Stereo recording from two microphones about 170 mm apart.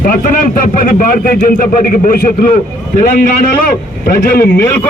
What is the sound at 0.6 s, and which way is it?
A man's voice, 50° left (ahead or behind).